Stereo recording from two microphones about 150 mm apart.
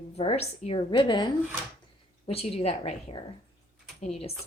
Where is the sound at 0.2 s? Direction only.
45° left (ahead or behind).